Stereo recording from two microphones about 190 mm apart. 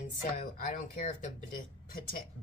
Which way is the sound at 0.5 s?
45° left (ahead or behind).